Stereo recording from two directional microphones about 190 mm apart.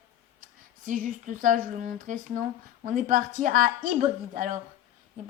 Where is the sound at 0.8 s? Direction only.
45° right (ahead or behind).